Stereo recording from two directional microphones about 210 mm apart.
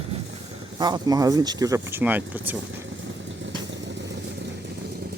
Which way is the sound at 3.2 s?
60° right (ahead or behind).